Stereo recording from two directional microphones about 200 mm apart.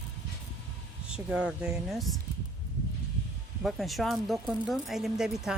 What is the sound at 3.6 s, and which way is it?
Speech, centre (ahead or behind).